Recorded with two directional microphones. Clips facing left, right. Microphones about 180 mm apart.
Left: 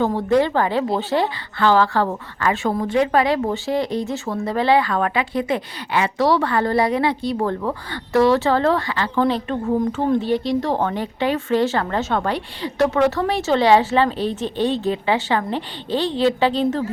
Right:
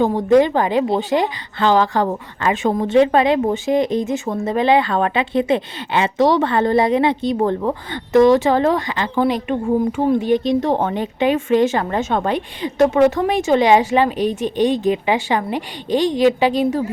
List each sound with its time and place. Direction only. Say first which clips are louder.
0.0 s a woman's voice: right 4 dB; 15° right (ahead or behind)